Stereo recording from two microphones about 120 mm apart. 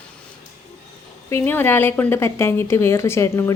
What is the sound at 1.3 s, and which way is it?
Speech, 20° left (ahead or behind).